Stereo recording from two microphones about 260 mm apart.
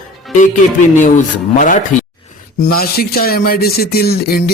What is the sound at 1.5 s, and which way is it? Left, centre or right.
Speech, left.